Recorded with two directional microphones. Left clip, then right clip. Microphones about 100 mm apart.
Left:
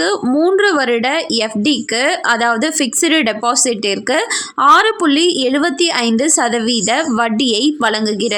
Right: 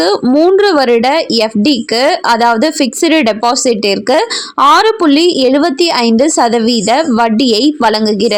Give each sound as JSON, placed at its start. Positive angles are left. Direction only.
{"t": 0.5, "sound": "a woman's voice", "side_deg": -35}